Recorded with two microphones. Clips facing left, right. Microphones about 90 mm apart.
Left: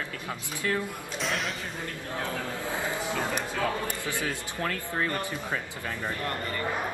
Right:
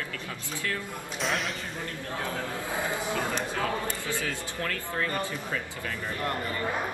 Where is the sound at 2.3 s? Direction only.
20° right (ahead or behind).